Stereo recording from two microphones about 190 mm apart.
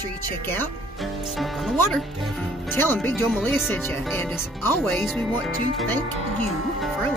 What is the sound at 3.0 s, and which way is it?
Speech, 10° left (ahead or behind).